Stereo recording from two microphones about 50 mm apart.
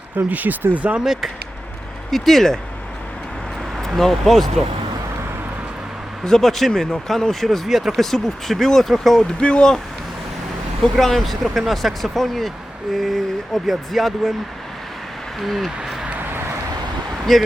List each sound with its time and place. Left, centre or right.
0.3 s speech: right
1.0 s speech: centre
2.0 s speech: centre
3.8 s speech: centre
6.2 s speech: centre
9.2 s speech: centre
10.9 s speech: centre
15.4 s speech: centre
17.3 s speech: centre